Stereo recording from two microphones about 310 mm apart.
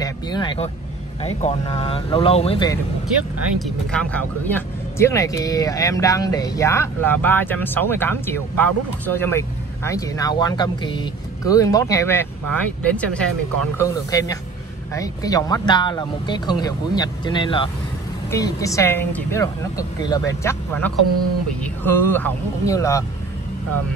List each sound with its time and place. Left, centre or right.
0.0 s vehicle: centre
1.2 s speech: centre
3.6 s speech: centre